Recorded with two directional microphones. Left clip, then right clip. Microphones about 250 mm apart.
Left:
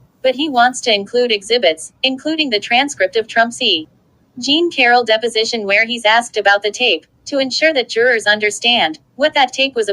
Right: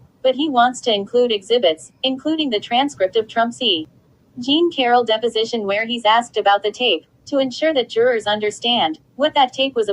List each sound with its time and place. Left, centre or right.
0.3 s speech: left